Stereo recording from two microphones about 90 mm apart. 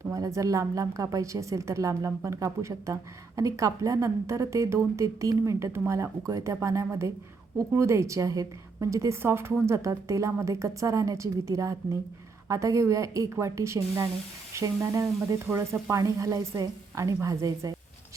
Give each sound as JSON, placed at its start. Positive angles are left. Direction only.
{"t": 0.1, "sound": "a woman's voice", "side_deg": -35}